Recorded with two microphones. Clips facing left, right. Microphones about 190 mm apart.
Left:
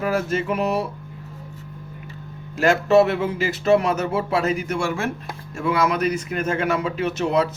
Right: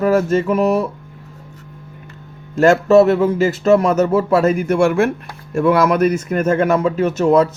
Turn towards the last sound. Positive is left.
turn(degrees=-45)  # may be behind; listen again after turning